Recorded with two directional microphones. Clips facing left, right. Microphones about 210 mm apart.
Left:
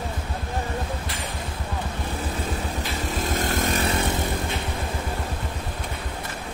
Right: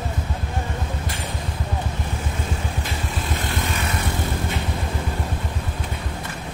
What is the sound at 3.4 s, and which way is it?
Vehicle, 45° left (ahead or behind).